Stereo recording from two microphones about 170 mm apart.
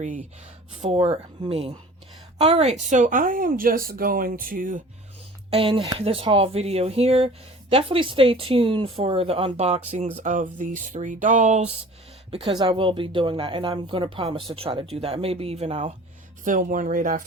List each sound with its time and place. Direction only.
0.0 s speech: 45° right (ahead or behind)
5.5 s speech: 30° right (ahead or behind)
12.3 s speech: 35° right (ahead or behind)
16.4 s speech: 50° right (ahead or behind)